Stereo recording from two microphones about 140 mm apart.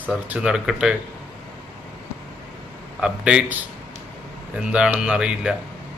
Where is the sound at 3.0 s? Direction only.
5° right (ahead or behind).